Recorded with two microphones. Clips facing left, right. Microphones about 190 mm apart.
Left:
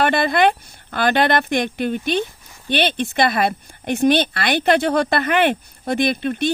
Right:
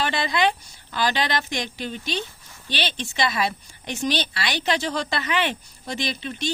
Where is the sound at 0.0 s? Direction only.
55° left (ahead or behind).